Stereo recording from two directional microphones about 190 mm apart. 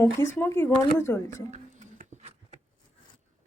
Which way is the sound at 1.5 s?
40° right (ahead or behind).